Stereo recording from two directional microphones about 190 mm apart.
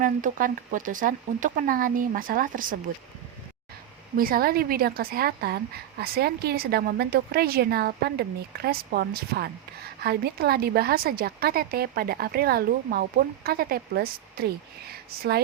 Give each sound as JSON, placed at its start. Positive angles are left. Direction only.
{"t": 0.0, "sound": "a woman's voice", "side_deg": -45}
{"t": 4.2, "sound": "a woman's voice", "side_deg": -50}